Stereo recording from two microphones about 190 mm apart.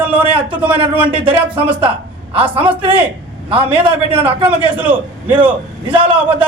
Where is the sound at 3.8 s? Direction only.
30° right (ahead or behind).